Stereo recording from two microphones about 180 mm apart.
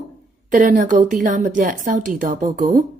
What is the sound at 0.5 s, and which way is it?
Speech, 45° right (ahead or behind).